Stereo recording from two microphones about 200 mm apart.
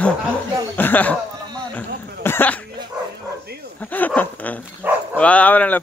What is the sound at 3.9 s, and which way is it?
Speech, 10° left (ahead or behind).